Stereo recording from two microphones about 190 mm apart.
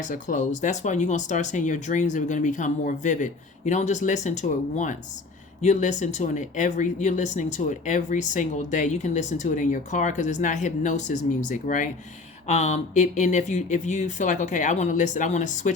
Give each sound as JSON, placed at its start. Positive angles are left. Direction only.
{"t": 0.0, "sound": "speech", "side_deg": 40}